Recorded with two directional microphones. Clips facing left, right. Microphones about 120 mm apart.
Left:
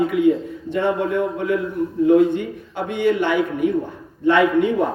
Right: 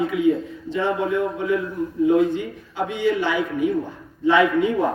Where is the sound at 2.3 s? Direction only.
55° left (ahead or behind).